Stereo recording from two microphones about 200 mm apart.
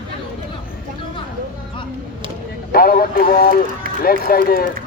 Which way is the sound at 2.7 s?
45° left (ahead or behind).